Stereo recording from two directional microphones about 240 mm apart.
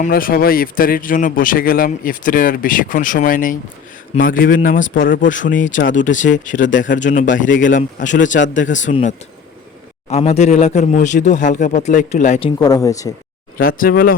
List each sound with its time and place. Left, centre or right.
0.0 s speech: left
12.6 s speech: centre
13.6 s speech: left